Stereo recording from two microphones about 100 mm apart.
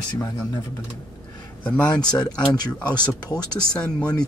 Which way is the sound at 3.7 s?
10° left (ahead or behind).